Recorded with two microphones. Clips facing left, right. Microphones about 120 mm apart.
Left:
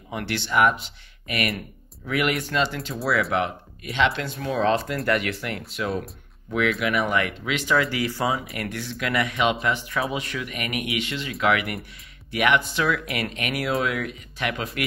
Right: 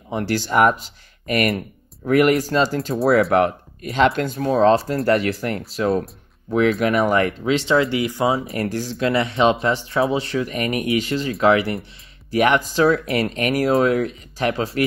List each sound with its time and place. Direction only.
0.1 s speech: 35° right (ahead or behind)
3.3 s speech: 50° right (ahead or behind); by 14.9 s 30° right (ahead or behind)